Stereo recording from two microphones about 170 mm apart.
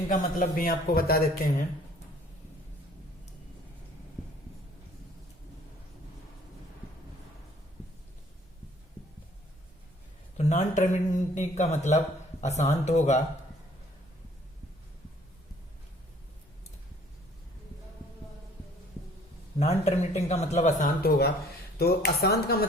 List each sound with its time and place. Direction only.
0.1 s a man's voice: 55° left (ahead or behind)
10.3 s speech: 40° left (ahead or behind)
19.5 s speech: 40° left (ahead or behind); by 22.5 s 70° left (ahead or behind)